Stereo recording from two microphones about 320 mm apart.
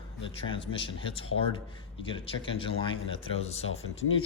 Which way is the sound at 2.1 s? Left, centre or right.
Centre.